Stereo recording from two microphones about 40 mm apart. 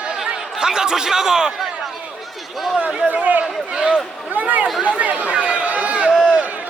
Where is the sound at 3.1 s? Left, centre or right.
Right.